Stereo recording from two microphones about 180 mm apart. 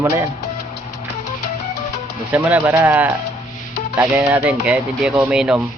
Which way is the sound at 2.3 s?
10° right (ahead or behind).